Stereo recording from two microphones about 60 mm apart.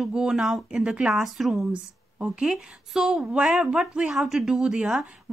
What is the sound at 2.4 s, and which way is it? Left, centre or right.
Speech, centre.